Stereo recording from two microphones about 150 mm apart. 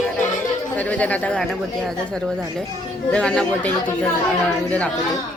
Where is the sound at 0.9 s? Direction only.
10° left (ahead or behind).